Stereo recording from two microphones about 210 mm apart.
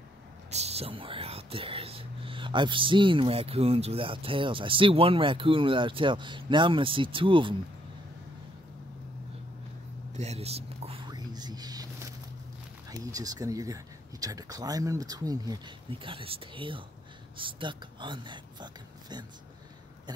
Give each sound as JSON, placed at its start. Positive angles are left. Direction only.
{"t": 0.5, "sound": "speech", "side_deg": -30}
{"t": 10.1, "sound": "whispering", "side_deg": -30}
{"t": 13.0, "sound": "speech", "side_deg": -15}